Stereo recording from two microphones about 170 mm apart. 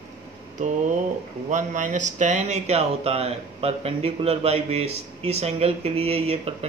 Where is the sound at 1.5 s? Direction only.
45° right (ahead or behind).